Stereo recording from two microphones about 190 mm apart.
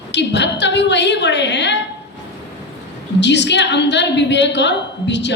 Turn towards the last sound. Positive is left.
turn(degrees=65)  # may be behind; listen again after turning